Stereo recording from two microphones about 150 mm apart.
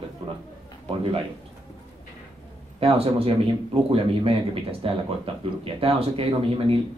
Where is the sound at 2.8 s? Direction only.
40° right (ahead or behind).